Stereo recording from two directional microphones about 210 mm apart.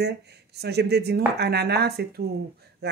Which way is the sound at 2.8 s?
50° right (ahead or behind).